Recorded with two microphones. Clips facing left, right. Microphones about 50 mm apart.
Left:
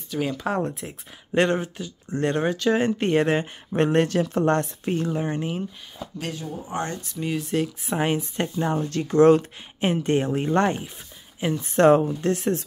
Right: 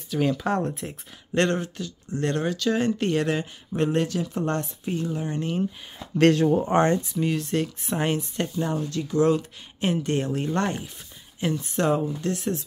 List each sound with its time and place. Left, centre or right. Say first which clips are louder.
0.1 s speech: right 2 dB; centre
1.3 s speech: left 2 dB; centre; by 5.1 s left
5.1 s speech: left 3 dB; left
6.1 s speech: right 15 dB; right
6.7 s speech: right 9 dB; right
7.1 s speech: right 1 dB; centre
8.2 s speech: left 2 dB; left
8.8 s speech: left 7 dB; left
9.8 s speech: left 3 dB; left
11.5 s speech: left 8 dB; left